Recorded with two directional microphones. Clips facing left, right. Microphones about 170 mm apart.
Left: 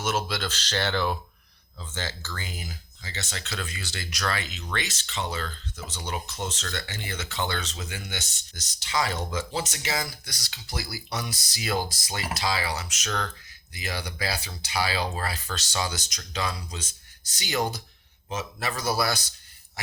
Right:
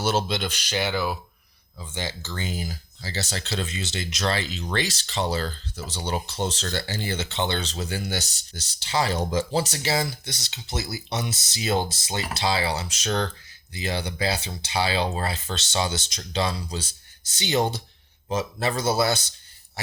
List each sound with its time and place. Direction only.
0.0 s speech: 30° right (ahead or behind)